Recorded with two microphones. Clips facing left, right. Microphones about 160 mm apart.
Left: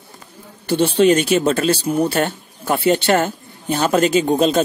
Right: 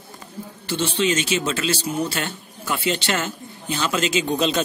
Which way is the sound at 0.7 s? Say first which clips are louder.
Left 8 dB; 60° left (ahead or behind).